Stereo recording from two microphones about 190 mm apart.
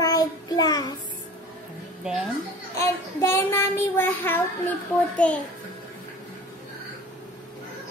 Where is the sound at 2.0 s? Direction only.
5° right (ahead or behind).